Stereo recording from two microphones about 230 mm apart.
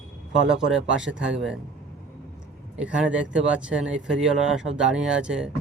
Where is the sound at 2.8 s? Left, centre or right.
Centre.